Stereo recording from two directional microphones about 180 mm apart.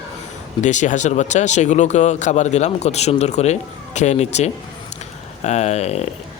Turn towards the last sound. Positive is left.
turn(degrees=35)  # may be behind; listen again after turning